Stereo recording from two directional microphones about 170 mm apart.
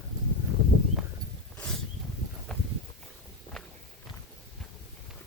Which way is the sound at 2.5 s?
5° left (ahead or behind).